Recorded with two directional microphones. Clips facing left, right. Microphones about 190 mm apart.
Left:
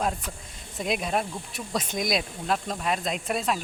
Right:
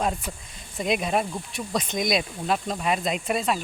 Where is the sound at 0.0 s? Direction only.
5° right (ahead or behind).